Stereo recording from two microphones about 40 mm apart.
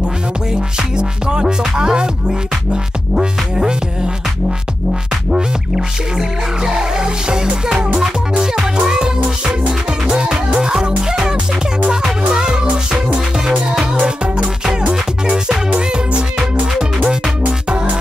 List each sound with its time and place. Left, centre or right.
0.5 s music: centre
5.3 s music: centre
14.0 s music: right
15.3 s music: centre
15.7 s music: right